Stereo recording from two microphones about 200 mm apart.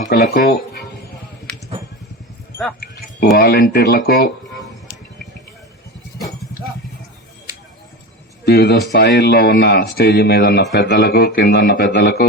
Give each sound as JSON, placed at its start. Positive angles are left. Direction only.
{"t": 0.1, "sound": "speech", "side_deg": 50}
{"t": 3.3, "sound": "speech", "side_deg": 50}
{"t": 8.4, "sound": "speech", "side_deg": 55}